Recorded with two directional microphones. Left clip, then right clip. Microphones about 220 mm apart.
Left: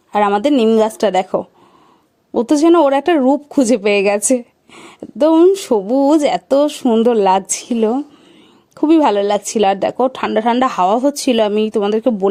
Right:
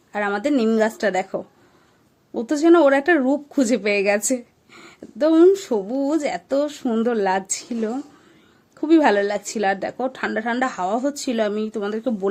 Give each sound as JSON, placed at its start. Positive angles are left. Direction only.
{"t": 0.1, "sound": "speech", "side_deg": 35}